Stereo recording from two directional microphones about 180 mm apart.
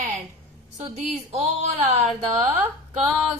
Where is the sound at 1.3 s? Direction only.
35° right (ahead or behind).